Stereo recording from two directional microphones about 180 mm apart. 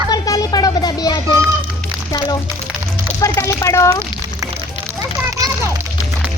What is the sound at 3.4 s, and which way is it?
Speech, 15° left (ahead or behind).